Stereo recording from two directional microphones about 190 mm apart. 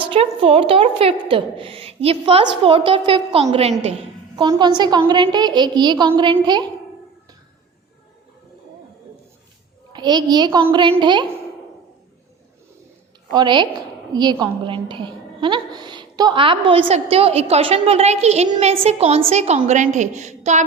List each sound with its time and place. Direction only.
0.0 s a woman's voice: 30° right (ahead or behind)
4.4 s a woman's voice: 20° right (ahead or behind)
9.9 s a woman's voice: 20° right (ahead or behind)
13.3 s a woman's voice: 25° right (ahead or behind)